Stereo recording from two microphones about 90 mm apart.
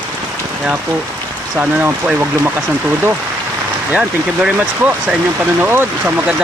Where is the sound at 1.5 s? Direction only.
15° right (ahead or behind).